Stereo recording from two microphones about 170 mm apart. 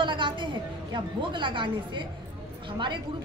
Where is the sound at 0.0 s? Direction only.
30° right (ahead or behind).